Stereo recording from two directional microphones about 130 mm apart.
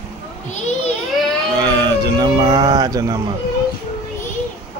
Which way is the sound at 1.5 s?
35° right (ahead or behind).